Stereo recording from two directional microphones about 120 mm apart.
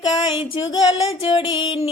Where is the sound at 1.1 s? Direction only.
55° left (ahead or behind).